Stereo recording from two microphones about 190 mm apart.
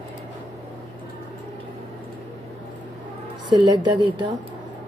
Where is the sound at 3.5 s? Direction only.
25° right (ahead or behind).